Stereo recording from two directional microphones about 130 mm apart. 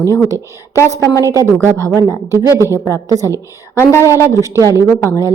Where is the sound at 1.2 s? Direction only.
25° right (ahead or behind).